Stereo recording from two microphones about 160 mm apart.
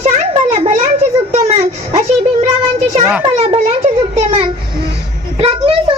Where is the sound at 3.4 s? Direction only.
35° right (ahead or behind).